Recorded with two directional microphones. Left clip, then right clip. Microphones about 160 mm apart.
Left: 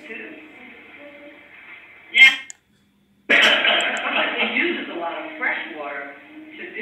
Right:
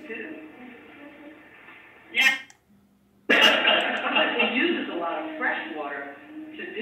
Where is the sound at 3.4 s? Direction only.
35° right (ahead or behind).